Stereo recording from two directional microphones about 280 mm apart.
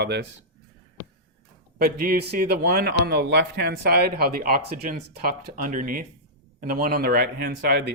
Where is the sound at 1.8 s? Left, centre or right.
Right.